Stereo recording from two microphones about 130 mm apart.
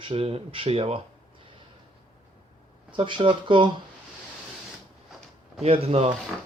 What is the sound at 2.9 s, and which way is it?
Speech, 40° right (ahead or behind).